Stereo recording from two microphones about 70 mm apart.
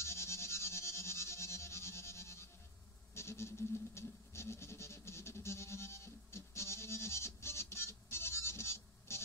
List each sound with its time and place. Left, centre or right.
0.0 s music: left
3.2 s goat: left